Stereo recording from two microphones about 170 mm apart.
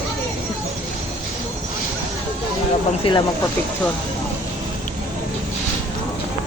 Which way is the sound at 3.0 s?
35° left (ahead or behind).